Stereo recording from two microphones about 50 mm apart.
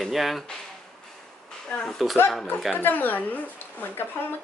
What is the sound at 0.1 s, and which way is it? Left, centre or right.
Speech, centre.